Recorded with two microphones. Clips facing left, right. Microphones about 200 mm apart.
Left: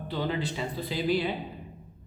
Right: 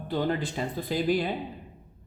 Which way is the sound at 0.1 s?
50° right (ahead or behind).